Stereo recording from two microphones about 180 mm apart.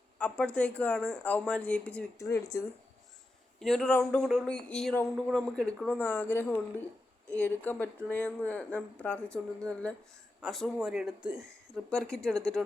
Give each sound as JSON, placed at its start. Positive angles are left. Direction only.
{"t": 0.2, "sound": "speech", "side_deg": 5}
{"t": 2.2, "sound": "speech", "side_deg": 15}
{"t": 3.6, "sound": "speech", "side_deg": 0}